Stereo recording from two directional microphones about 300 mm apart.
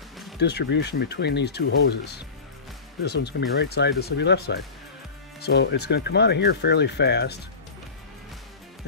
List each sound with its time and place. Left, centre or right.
0.4 s speech: left